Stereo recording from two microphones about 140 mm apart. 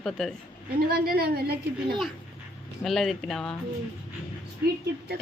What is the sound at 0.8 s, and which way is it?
Speech, 90° right.